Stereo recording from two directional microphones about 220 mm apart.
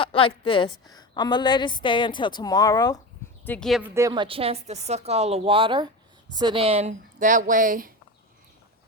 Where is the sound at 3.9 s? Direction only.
15° right (ahead or behind); by 7.9 s 40° right (ahead or behind).